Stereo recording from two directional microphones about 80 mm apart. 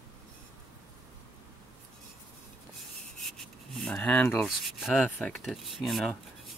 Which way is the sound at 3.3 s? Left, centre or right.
Centre.